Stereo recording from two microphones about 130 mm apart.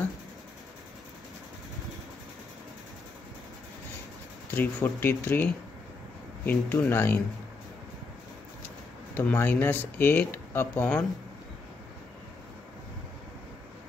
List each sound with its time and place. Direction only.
4.6 s speech: 15° left (ahead or behind)
8.6 s speech: 15° left (ahead or behind)